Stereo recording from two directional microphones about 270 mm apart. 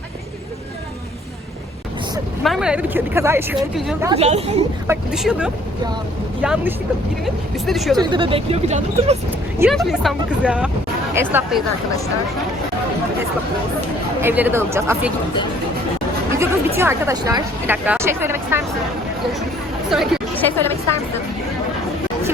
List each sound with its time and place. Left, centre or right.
2.4 s speech: centre
4.1 s speech: right
4.9 s speech: centre
7.9 s speech: centre
9.6 s speech: centre
14.2 s speech: centre
16.3 s speech: centre
19.9 s speech: centre